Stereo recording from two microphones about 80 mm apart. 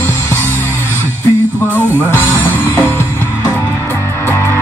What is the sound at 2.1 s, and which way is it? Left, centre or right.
Music, left.